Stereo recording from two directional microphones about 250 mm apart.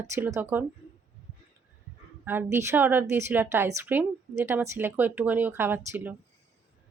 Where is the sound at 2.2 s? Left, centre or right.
Centre.